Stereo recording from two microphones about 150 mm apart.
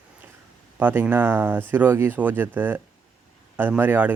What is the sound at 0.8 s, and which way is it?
A man's voice, 10° right (ahead or behind).